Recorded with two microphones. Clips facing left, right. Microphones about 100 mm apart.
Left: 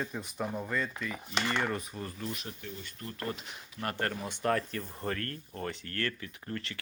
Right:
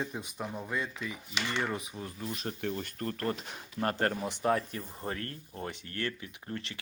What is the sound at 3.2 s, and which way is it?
Speech, 40° right (ahead or behind).